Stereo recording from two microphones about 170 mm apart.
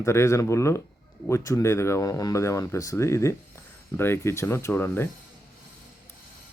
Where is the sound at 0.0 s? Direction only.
15° left (ahead or behind).